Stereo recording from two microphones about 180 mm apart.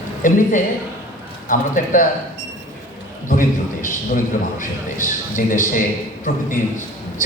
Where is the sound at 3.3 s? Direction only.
50° left (ahead or behind).